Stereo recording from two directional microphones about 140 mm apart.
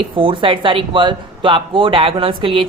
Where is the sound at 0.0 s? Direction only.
40° right (ahead or behind).